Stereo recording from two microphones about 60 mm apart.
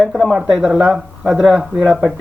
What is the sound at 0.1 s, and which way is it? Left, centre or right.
Speech, centre.